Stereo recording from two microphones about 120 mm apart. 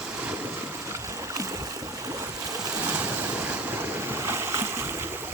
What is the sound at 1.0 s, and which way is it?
Boat, 25° right (ahead or behind).